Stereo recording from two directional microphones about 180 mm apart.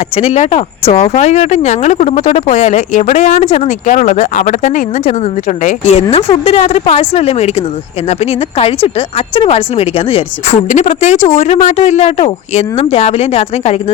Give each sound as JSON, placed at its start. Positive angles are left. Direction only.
{"t": 0.2, "sound": "speech", "side_deg": 35}